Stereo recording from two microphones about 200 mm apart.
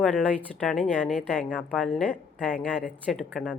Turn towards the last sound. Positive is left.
turn(degrees=5)  # may be behind; listen again after turning